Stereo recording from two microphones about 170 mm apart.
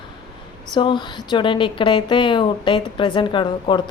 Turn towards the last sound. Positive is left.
turn(degrees=25)  # may be behind; listen again after turning